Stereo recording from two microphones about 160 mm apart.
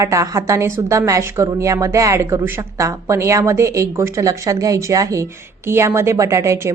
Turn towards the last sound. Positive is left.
turn(degrees=-15)  # may be behind; listen again after turning